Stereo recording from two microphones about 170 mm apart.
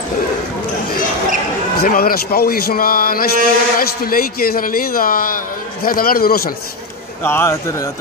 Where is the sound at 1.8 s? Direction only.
60° left (ahead or behind).